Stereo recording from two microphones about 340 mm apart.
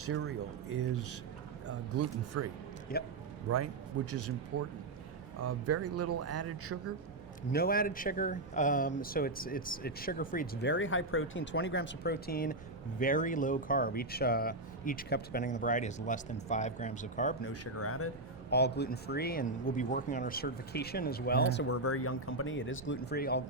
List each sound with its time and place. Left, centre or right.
0.0 s speech: right
2.9 s speech: left
4.1 s speech: right
7.5 s speech: left
17.5 s speech: left
18.5 s speech: left